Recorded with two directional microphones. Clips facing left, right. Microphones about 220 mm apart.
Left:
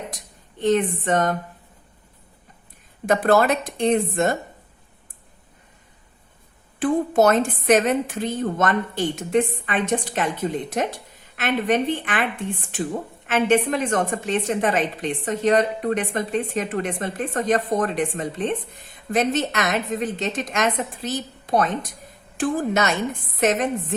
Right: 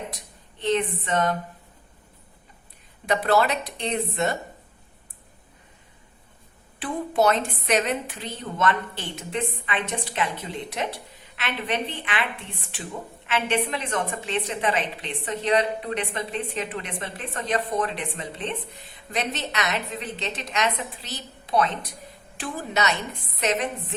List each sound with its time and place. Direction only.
0.6 s a woman's voice: 45° left (ahead or behind)
3.1 s a woman's voice: 45° left (ahead or behind)
6.7 s a woman's voice: 45° left (ahead or behind)